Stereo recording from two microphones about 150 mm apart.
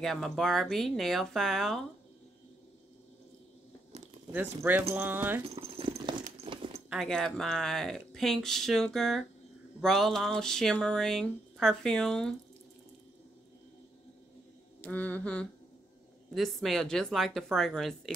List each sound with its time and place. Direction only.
0.0 s speech: centre (ahead or behind)
4.3 s speech: 10° right (ahead or behind)
5.6 s a sound: 35° right (ahead or behind)
6.9 s speech: centre (ahead or behind)
14.8 s a sound: 10° left (ahead or behind)
16.3 s speech: centre (ahead or behind)